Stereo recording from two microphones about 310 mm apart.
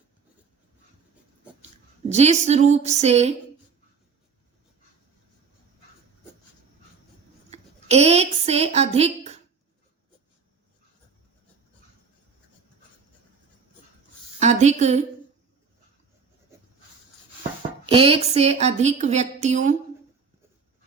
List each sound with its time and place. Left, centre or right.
2.0 s a woman's voice: right
7.5 s a sound: centre
14.3 s a woman's voice: right
17.8 s a woman's voice: centre